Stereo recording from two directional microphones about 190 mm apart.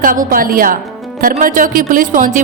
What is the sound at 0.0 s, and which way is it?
Speech, 45° right (ahead or behind).